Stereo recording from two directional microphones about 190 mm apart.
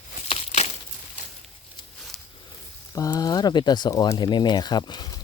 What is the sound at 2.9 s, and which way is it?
Speech, 20° left (ahead or behind).